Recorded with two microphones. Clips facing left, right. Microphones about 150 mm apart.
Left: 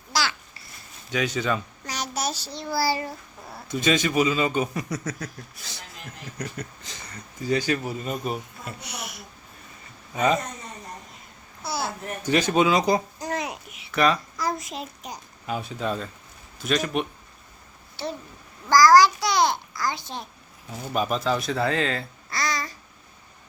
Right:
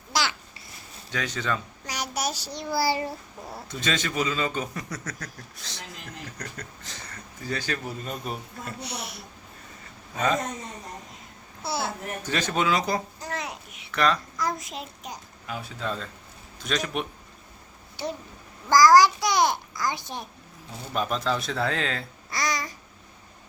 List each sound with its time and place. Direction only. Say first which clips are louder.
0.1 s babbling: left 1 dB; 20° right (ahead or behind)
1.1 s a man's voice: left 4 dB; 10° left (ahead or behind)
1.9 s child singing: left 1 dB; 10° right (ahead or behind)
2.7 s a child's voice: even; 20° right (ahead or behind)
3.7 s a man's voice: left 7 dB; 10° left (ahead or behind)
8.8 s a sound: right 2 dB; 30° right (ahead or behind)
11.6 s a sound: even; 25° right (ahead or behind)
12.2 s speech: left 6 dB; 15° left (ahead or behind)
13.7 s a sound: left 2 dB; 10° left (ahead or behind)
15.4 s speech: left 4 dB; 20° left (ahead or behind)
16.6 s speech: left 4 dB; 5° left (ahead or behind)
18.0 s a child's voice: even; 15° right (ahead or behind)
20.9 s speech: left 2 dB; 10° left (ahead or behind)
22.3 s babbling: even; 15° right (ahead or behind)